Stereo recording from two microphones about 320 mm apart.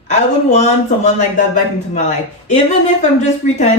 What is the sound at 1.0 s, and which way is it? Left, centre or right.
Speech, left.